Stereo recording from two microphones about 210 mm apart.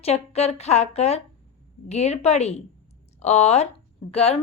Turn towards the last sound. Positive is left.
turn(degrees=30)  # may be behind; listen again after turning